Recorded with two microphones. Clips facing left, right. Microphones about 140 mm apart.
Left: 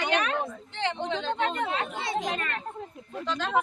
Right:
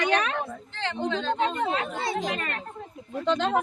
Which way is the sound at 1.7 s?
35° right (ahead or behind).